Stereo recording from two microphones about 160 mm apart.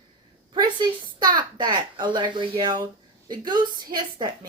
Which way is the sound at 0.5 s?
25° right (ahead or behind).